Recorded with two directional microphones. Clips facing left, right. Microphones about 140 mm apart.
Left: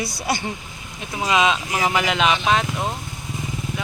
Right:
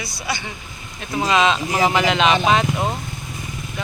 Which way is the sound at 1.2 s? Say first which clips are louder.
Right 1 dB; 10° left (ahead or behind).